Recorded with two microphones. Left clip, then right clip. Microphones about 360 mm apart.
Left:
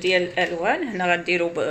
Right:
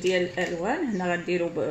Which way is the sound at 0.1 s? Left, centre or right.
Left.